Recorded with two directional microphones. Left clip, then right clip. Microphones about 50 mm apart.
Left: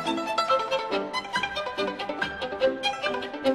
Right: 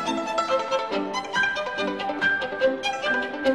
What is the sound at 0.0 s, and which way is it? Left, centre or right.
Music, left.